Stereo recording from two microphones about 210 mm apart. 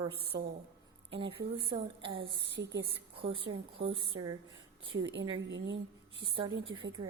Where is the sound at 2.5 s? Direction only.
55° right (ahead or behind).